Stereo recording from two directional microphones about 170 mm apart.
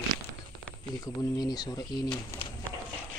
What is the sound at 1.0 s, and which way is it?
Speech, 25° left (ahead or behind).